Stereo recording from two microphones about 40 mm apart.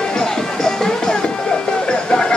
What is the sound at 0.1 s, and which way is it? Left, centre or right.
Music, centre.